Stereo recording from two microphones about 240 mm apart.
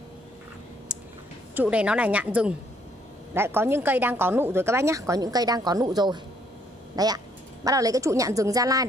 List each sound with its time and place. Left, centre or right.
1.5 s a woman's voice: centre